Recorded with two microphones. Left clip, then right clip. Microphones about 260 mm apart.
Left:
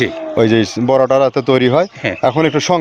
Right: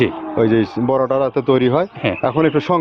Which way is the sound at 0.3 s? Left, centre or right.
Left.